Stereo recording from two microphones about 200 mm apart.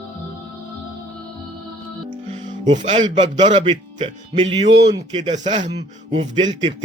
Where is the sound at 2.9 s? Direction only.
25° right (ahead or behind).